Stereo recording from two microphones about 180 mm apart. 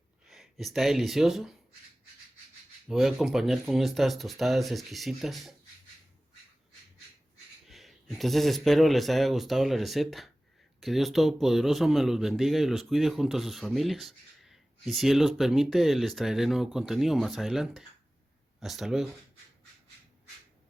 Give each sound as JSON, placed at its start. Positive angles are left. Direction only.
{"t": 0.3, "sound": "speech", "side_deg": 0}
{"t": 2.8, "sound": "speech", "side_deg": 0}
{"t": 7.7, "sound": "speech", "side_deg": 0}